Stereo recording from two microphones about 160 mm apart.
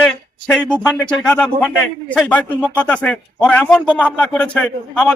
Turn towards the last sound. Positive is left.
turn(degrees=5)  # may be behind; listen again after turning